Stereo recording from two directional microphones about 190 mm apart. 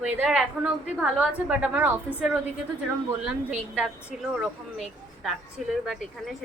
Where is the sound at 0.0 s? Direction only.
5° right (ahead or behind).